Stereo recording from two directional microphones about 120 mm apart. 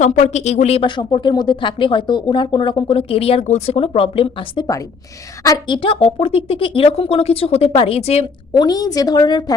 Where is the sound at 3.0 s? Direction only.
55° left (ahead or behind).